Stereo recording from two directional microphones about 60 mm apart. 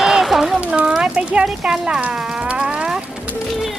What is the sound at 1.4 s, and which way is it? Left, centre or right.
Speech, centre.